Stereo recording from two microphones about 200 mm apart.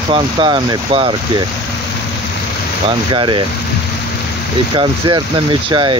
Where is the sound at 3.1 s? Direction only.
25° right (ahead or behind).